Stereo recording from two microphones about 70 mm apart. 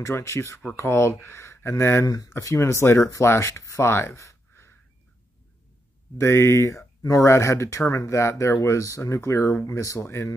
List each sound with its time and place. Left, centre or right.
0.0 s speech: left
2.0 s speech: left
2.4 s speech: left
6.1 s speech: left